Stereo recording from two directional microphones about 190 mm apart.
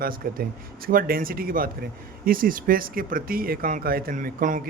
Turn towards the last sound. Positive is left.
turn(degrees=-45)  # may be behind; listen again after turning